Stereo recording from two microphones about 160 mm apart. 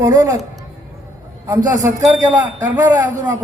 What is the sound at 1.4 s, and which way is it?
A man's voice, 20° right (ahead or behind).